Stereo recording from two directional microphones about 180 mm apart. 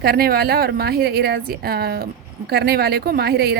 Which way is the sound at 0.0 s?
55° right (ahead or behind).